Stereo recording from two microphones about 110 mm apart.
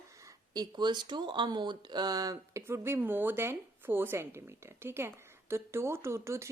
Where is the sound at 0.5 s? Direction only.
40° right (ahead or behind).